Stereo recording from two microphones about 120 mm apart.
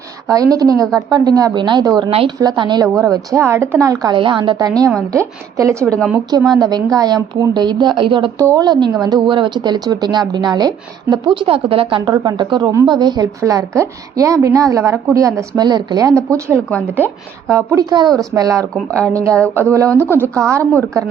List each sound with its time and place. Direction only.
0.3 s speech: 30° right (ahead or behind)
2.0 s a woman's voice: 50° right (ahead or behind)
2.4 s a woman's voice: 35° right (ahead or behind)
4.0 s speech: 40° right (ahead or behind)
5.1 s a woman's voice: 25° right (ahead or behind); by 8.3 s 45° right (ahead or behind)
8.4 s a woman's voice: 30° right (ahead or behind)
17.8 s speech: 35° right (ahead or behind)
18.1 s speech: 5° left (ahead or behind)
18.3 s a woman's voice: 30° right (ahead or behind)